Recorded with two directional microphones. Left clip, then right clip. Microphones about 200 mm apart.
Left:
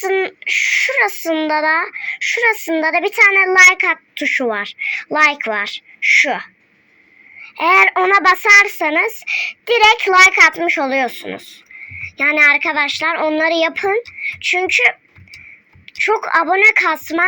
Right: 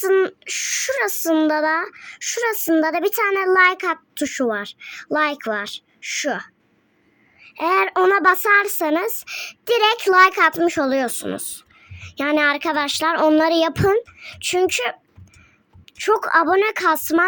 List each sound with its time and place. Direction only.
0.0 s a woman's voice: 50° right (ahead or behind)